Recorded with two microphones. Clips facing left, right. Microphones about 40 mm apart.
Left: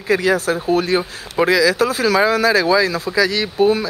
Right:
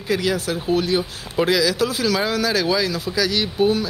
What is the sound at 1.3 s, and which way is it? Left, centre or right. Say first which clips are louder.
Speech: left 4 dB; left.